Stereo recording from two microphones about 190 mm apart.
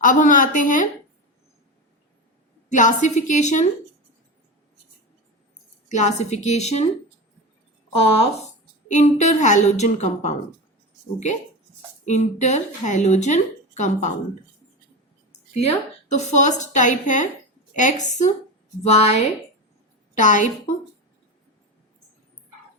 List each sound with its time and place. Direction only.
0.0 s a woman's voice: 45° left (ahead or behind)
2.6 s a woman's voice: 40° left (ahead or behind)
5.9 s speech: 40° left (ahead or behind)
7.9 s speech: 30° left (ahead or behind)
12.0 s speech: 40° left (ahead or behind)
15.3 s a woman's voice: 35° left (ahead or behind)
20.1 s speech: 40° left (ahead or behind)